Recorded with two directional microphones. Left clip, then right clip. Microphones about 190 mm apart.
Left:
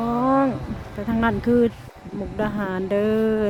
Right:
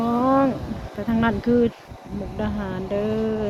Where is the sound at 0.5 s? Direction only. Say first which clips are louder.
Right 1 dB; 50° right (ahead or behind).